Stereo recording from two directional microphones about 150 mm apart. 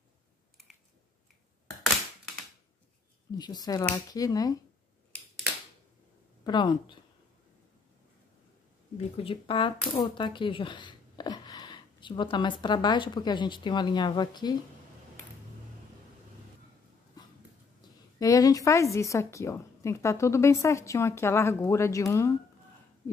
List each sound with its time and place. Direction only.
3.3 s a woman's voice: 25° left (ahead or behind)
6.4 s speech: 30° left (ahead or behind)
9.1 s speech: 35° left (ahead or behind)
18.2 s a woman's voice: 25° left (ahead or behind)